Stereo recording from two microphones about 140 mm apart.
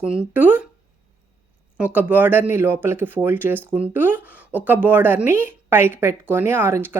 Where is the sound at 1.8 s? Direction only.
10° right (ahead or behind).